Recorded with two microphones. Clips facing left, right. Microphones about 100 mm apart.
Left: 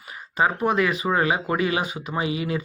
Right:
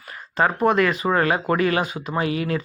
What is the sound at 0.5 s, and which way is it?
Speech, 50° right (ahead or behind).